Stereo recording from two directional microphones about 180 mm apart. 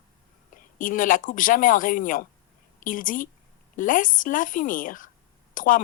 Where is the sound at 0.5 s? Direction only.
50° left (ahead or behind).